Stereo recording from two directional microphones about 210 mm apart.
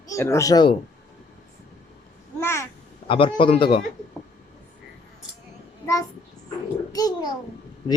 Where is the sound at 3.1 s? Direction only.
25° left (ahead or behind).